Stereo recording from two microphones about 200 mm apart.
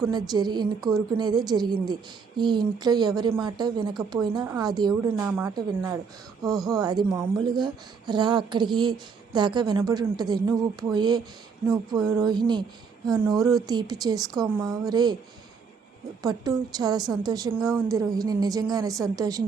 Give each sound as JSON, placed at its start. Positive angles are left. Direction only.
{"t": 0.0, "sound": "speech", "side_deg": -20}
{"t": 0.8, "sound": "a woman's voice", "side_deg": 0}
{"t": 1.1, "sound": "speech", "side_deg": -20}
{"t": 16.2, "sound": "speech", "side_deg": -20}